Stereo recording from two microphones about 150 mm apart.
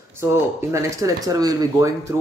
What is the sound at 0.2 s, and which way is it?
Speech, 15° right (ahead or behind).